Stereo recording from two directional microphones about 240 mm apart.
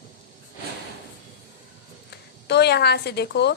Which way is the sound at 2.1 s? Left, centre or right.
Left.